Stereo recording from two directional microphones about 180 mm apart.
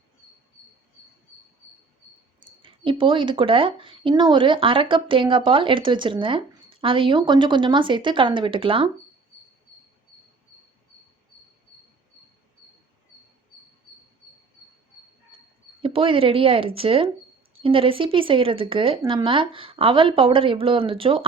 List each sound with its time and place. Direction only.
2.6 s speech: 30° right (ahead or behind)
15.8 s speech: 30° right (ahead or behind)